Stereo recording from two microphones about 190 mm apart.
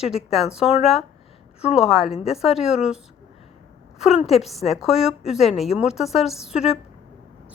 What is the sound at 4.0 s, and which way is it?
A woman's voice, 5° right (ahead or behind).